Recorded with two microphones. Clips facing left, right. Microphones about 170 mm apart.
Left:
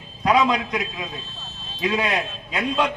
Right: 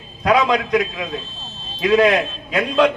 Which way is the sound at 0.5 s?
85° right.